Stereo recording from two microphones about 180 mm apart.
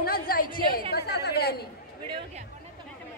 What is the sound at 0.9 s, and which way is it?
Chatter, 65° left (ahead or behind).